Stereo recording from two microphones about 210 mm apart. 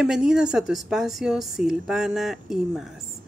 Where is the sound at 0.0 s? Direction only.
5° right (ahead or behind).